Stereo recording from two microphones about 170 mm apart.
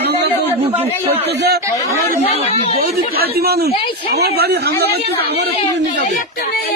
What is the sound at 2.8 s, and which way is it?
Speech, 60° right (ahead or behind).